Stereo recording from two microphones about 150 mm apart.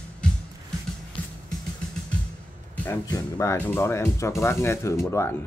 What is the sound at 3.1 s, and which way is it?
Speech, 20° left (ahead or behind).